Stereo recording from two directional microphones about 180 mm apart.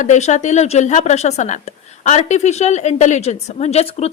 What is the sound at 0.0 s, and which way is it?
A woman's voice, 40° left (ahead or behind).